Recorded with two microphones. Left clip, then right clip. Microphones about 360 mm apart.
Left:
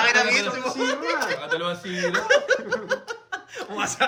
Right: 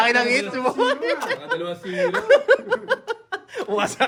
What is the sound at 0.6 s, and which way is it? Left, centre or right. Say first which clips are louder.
Speech: right 5 dB; centre.